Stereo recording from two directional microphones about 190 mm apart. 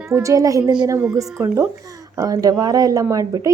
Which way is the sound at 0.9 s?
10° right (ahead or behind).